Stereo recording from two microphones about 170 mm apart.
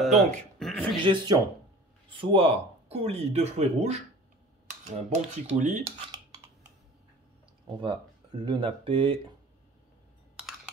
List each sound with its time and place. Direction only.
0.0 s speech: centre (ahead or behind)
0.6 s a sound: centre (ahead or behind)
1.0 s speech: 25° right (ahead or behind)
5.1 s speech: 45° right (ahead or behind)
7.6 s speech: 30° right (ahead or behind)